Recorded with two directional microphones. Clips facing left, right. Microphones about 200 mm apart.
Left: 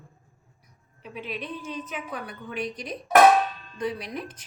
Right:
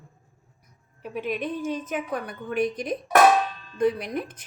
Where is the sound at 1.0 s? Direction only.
50° right (ahead or behind).